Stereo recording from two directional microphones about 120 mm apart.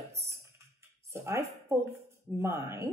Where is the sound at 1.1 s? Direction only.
25° right (ahead or behind).